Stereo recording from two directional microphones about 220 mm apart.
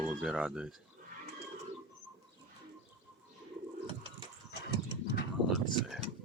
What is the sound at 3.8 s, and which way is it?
Pigeon, 25° right (ahead or behind).